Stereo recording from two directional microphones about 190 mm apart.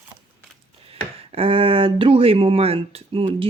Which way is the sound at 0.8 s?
30° right (ahead or behind).